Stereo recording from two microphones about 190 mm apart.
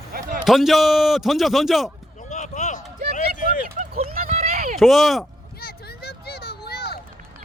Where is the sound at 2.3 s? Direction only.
40° left (ahead or behind).